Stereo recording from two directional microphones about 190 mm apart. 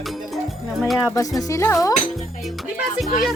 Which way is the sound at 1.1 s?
20° left (ahead or behind).